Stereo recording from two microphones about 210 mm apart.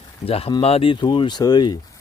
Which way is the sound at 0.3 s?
30° left (ahead or behind).